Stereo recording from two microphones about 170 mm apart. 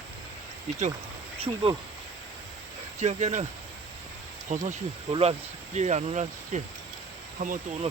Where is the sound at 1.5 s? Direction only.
25° right (ahead or behind).